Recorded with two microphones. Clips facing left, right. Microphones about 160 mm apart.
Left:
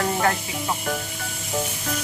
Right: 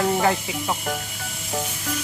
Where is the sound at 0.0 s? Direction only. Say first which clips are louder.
Right 2 dB; 10° right (ahead or behind).